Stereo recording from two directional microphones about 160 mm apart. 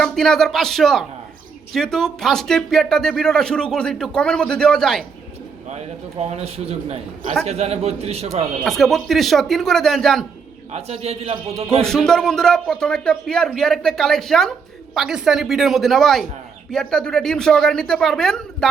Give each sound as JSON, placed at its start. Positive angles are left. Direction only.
{"t": 0.0, "sound": "speech", "side_deg": 5}
{"t": 5.6, "sound": "a man's voice", "side_deg": -45}
{"t": 8.6, "sound": "speech", "side_deg": 0}
{"t": 10.7, "sound": "a man's voice", "side_deg": -40}
{"t": 11.8, "sound": "speech", "side_deg": 5}